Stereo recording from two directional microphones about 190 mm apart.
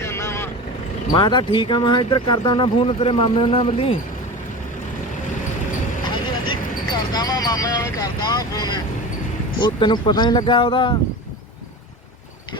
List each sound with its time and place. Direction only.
0.0 s vehicle: 15° left (ahead or behind)
1.1 s speech: 25° left (ahead or behind)
6.5 s vehicle: 20° left (ahead or behind)
9.6 s speech: 25° left (ahead or behind)